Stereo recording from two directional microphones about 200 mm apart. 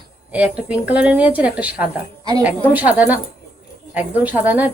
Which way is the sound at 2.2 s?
20° right (ahead or behind).